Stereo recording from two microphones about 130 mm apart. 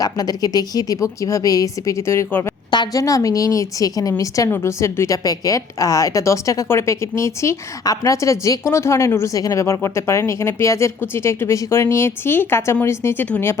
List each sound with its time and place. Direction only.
0.0 s a woman's voice: 30° left (ahead or behind)